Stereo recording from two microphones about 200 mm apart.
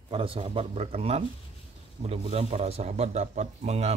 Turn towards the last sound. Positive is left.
turn(degrees=-35)  # may be behind; listen again after turning